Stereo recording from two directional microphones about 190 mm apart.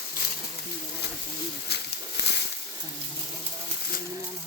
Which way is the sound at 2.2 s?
70° right (ahead or behind).